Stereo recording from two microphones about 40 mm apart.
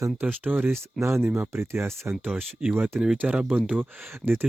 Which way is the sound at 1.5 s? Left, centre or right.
Right.